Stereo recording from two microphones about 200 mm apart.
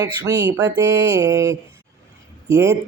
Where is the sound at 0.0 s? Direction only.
15° right (ahead or behind).